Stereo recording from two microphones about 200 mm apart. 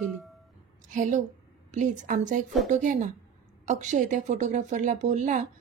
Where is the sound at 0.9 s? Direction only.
40° right (ahead or behind).